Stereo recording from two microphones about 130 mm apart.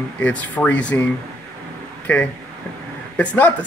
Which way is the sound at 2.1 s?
10° left (ahead or behind).